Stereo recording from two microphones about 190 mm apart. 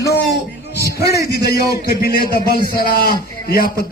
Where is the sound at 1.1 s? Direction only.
15° right (ahead or behind).